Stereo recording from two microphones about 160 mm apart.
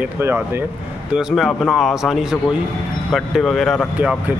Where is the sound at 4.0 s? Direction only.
10° right (ahead or behind).